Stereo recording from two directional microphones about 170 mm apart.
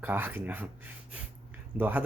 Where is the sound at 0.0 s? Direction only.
10° right (ahead or behind).